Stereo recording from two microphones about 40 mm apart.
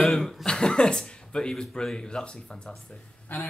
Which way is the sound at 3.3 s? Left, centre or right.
Left.